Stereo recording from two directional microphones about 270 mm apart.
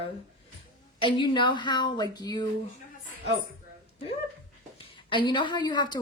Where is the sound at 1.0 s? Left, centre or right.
Centre.